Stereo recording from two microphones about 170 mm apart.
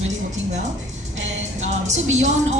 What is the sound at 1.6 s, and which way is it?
Speech, 45° right (ahead or behind).